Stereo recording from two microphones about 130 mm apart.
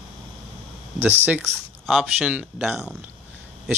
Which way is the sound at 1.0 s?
10° right (ahead or behind).